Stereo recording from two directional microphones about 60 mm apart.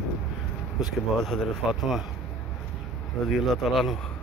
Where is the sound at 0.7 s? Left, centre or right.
Centre.